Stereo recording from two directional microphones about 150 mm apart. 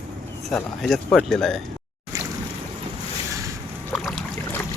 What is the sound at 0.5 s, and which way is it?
Speech, 5° left (ahead or behind).